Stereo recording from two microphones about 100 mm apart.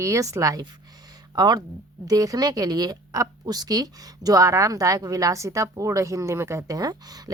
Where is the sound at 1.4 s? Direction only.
45° right (ahead or behind).